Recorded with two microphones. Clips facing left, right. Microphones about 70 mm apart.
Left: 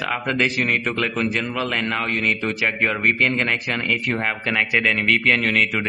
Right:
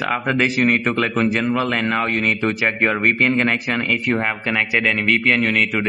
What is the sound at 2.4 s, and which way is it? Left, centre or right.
Speech, right.